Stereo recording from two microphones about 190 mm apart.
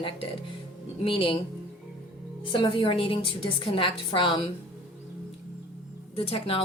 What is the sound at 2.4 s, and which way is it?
A woman's voice, 25° left (ahead or behind).